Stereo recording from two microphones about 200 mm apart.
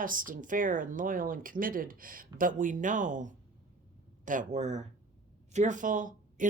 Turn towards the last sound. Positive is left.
turn(degrees=-40)  # may be behind; listen again after turning